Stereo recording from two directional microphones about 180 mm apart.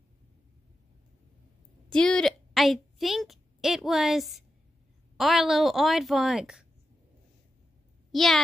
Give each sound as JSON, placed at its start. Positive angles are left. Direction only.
{"t": 1.9, "sound": "a woman's voice", "side_deg": 5}
{"t": 8.1, "sound": "a child's voice", "side_deg": 0}